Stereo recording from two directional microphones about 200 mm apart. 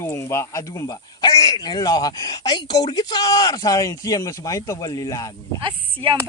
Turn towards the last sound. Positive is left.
turn(degrees=-25)  # may be behind; listen again after turning